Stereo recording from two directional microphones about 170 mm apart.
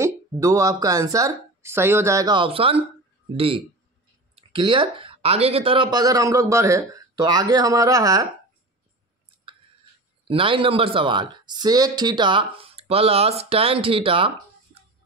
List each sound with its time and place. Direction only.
0.0 s speech: 20° right (ahead or behind)
10.2 s speech: 30° right (ahead or behind)